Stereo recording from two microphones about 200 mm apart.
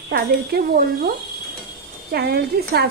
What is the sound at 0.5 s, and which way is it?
Speech, 50° right (ahead or behind).